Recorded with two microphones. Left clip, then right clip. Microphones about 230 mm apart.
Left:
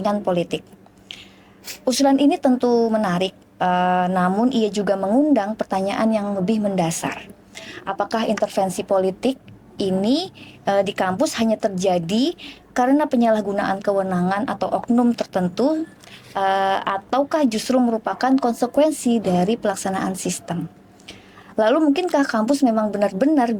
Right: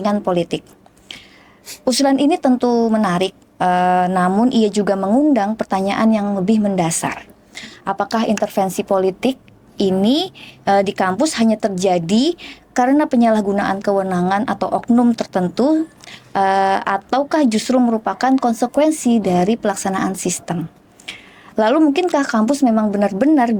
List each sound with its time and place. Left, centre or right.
0.0 s a woman's voice: right
1.8 s a woman's voice: right